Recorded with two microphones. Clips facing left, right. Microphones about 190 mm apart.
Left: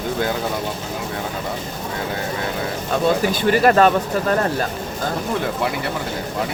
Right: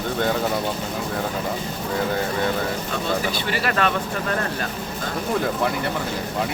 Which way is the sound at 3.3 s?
45° left (ahead or behind).